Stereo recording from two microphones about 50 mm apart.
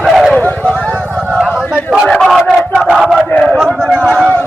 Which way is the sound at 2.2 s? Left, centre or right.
Centre.